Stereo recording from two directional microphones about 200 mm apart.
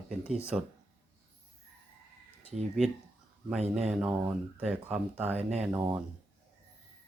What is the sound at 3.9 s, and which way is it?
Speech, 5° right (ahead or behind).